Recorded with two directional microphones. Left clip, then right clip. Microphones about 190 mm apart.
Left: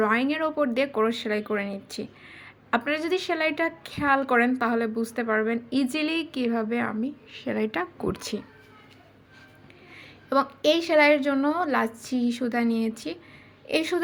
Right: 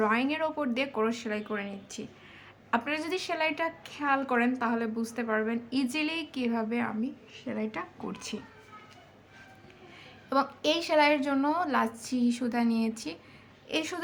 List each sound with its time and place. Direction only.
0.0 s a woman's voice: 15° left (ahead or behind)
7.3 s speech: 30° left (ahead or behind)
10.2 s a woman's voice: 15° left (ahead or behind)